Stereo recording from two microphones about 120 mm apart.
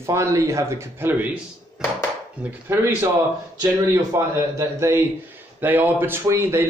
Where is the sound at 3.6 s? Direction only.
25° right (ahead or behind).